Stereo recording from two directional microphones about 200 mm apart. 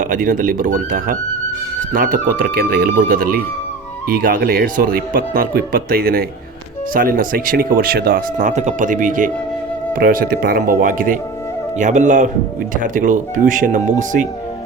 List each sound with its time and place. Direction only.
0.0 s speech: 40° right (ahead or behind)